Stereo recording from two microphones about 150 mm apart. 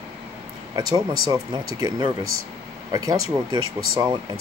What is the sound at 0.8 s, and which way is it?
Speech, 25° right (ahead or behind).